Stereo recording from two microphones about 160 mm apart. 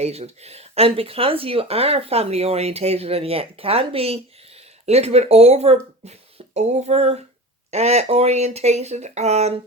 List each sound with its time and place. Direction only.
0.0 s speech: 40° right (ahead or behind)